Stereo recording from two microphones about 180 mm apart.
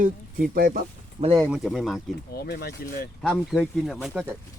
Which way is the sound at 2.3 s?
60° left (ahead or behind).